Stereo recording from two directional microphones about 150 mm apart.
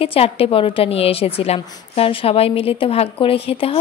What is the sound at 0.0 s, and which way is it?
A woman's voice, 40° left (ahead or behind).